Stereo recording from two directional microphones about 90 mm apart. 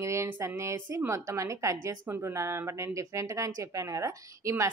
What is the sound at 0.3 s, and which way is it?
Speech, 25° right (ahead or behind).